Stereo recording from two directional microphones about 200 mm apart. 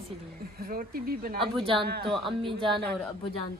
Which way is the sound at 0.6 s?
45° right (ahead or behind).